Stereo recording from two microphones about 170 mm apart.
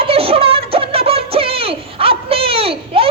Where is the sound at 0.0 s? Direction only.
35° right (ahead or behind).